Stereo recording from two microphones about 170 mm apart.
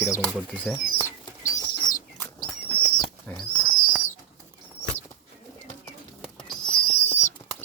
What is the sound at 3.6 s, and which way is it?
Owl, 55° left (ahead or behind).